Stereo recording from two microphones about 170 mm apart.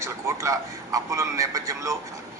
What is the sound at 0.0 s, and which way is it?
A man's voice, 15° right (ahead or behind).